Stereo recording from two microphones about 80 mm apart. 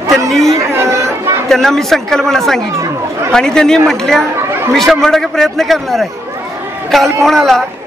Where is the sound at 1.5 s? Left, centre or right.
Centre.